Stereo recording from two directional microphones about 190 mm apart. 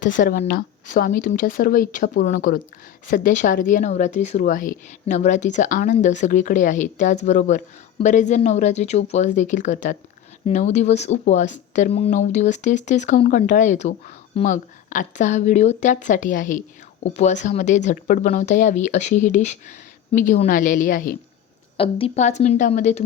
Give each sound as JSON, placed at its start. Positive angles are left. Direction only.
{"t": 0.0, "sound": "speech", "side_deg": 45}
{"t": 21.8, "sound": "speech", "side_deg": 30}